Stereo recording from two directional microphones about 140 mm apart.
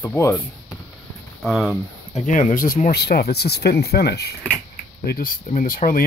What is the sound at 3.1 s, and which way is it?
Speech, 90° left.